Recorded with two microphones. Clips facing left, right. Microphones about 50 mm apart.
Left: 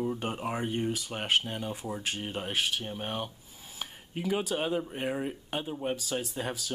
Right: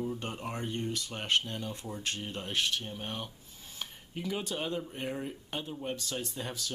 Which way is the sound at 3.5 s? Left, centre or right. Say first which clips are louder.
Left 2 dB; centre.